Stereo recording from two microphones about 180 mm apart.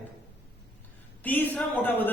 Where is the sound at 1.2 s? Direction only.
10° left (ahead or behind).